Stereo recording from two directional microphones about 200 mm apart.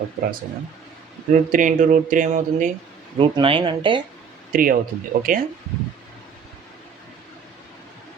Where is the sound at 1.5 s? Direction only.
40° right (ahead or behind).